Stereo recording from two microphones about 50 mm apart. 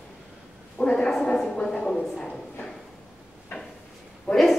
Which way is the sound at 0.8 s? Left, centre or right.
Centre.